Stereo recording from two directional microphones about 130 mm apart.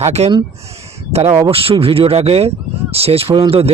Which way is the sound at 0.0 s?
55° right (ahead or behind).